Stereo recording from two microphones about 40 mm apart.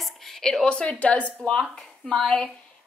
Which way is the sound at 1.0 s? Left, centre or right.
Left.